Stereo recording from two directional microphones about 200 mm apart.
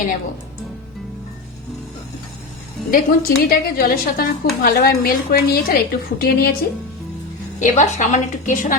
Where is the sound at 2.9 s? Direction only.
45° left (ahead or behind).